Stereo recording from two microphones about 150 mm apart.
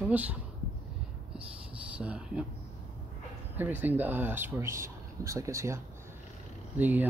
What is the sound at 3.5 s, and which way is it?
Speech, 10° right (ahead or behind).